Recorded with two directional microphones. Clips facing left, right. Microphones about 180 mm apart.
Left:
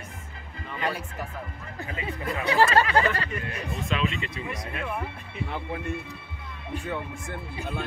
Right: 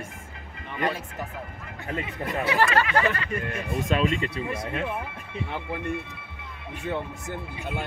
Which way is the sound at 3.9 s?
45° right (ahead or behind).